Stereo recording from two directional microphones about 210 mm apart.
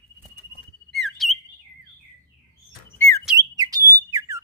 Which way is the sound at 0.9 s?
Centre (ahead or behind).